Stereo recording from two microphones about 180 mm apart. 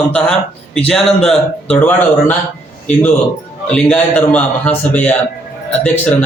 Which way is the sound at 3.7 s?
5° left (ahead or behind).